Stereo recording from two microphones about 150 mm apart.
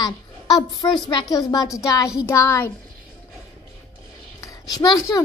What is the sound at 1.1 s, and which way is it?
A child's voice, 30° left (ahead or behind).